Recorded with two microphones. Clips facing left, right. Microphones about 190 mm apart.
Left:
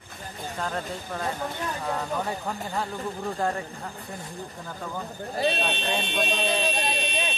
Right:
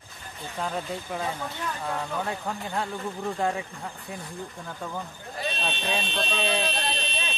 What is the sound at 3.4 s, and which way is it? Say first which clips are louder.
Speech: even; centre (ahead or behind).